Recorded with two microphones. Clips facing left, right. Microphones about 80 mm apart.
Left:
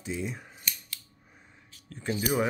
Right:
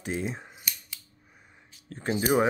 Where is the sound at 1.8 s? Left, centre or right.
Right.